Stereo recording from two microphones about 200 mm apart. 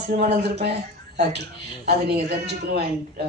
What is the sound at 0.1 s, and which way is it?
Speech, 50° right (ahead or behind).